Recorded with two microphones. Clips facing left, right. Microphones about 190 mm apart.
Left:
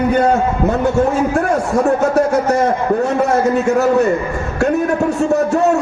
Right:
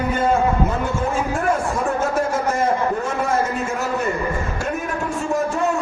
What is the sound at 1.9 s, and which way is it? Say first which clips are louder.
A man's voice: left 7 dB; 75° left (ahead or behind).